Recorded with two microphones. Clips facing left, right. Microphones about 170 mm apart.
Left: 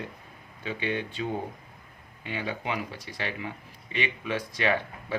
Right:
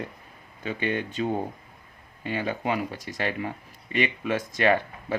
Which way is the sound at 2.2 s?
45° right (ahead or behind).